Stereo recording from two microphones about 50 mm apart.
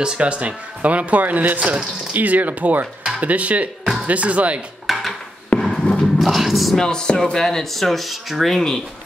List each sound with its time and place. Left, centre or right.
0.0 s speech: right
4.8 s a sound: centre
6.1 s speech: centre
6.8 s speech: centre